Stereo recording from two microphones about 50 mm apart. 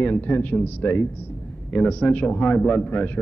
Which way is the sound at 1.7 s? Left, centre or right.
Left.